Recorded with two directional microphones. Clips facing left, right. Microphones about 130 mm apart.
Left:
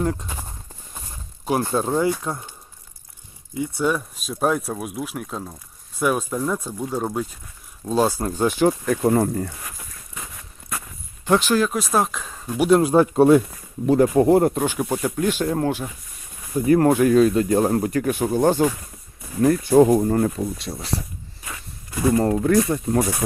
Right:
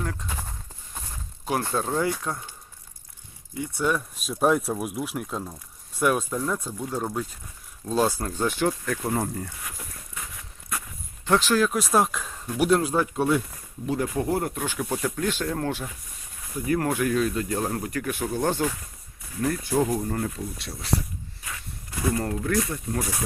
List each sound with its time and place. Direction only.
0.0 s speech: 25° left (ahead or behind)
0.3 s clip-clop: 10° left (ahead or behind)
1.5 s speech: 15° left (ahead or behind)
3.6 s speech: 5° left (ahead or behind)
8.2 s speech: 15° left (ahead or behind)
9.0 s speech: 70° left (ahead or behind)
11.3 s speech: 5° left (ahead or behind)
12.8 s speech: 30° left (ahead or behind)
13.8 s speech: 45° left (ahead or behind)
14.7 s speech: 20° left (ahead or behind)
16.6 s speech: 35° left (ahead or behind); by 18.6 s 15° left (ahead or behind)
19.7 s speech: 45° left (ahead or behind)
20.6 s speech: 20° left (ahead or behind)
22.1 s speech: 30° left (ahead or behind)